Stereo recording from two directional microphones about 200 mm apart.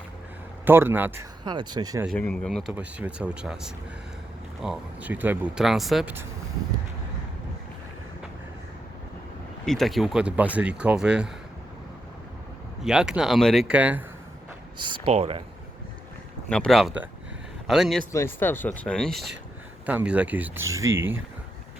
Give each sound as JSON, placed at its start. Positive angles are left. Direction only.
{"t": 0.6, "sound": "speech", "side_deg": -10}
{"t": 2.0, "sound": "speech", "side_deg": 5}
{"t": 9.6, "sound": "speech", "side_deg": 0}
{"t": 12.8, "sound": "speech", "side_deg": -5}
{"t": 14.8, "sound": "speech", "side_deg": -25}
{"t": 16.5, "sound": "speech", "side_deg": 5}
{"t": 18.1, "sound": "speech", "side_deg": 10}